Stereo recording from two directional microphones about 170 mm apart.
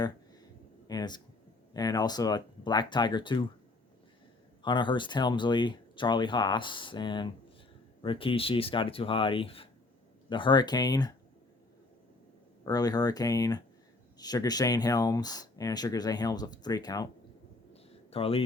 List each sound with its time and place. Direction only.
0.9 s speech: 25° left (ahead or behind)
4.6 s speech: 25° left (ahead or behind)
12.6 s speech: 20° left (ahead or behind)
18.1 s speech: 35° left (ahead or behind)